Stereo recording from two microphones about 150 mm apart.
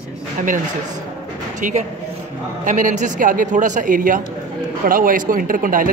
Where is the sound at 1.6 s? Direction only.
55° right (ahead or behind).